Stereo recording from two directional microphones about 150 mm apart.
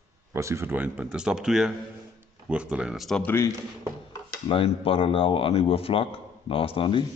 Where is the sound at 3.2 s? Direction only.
15° left (ahead or behind).